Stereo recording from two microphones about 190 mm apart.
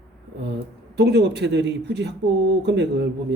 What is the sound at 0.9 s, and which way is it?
Speech, 60° right (ahead or behind).